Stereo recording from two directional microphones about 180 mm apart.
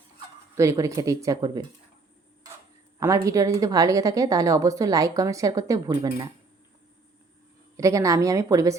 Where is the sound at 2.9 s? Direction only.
15° right (ahead or behind).